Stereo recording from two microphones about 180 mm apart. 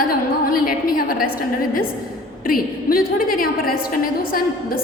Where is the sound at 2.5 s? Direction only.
50° left (ahead or behind).